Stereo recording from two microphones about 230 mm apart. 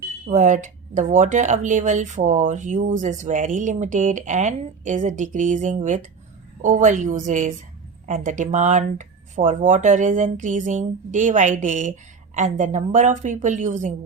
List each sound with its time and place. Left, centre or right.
0.3 s speech: right